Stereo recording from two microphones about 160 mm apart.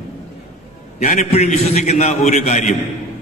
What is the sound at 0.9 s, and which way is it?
A man's voice, 45° left (ahead or behind).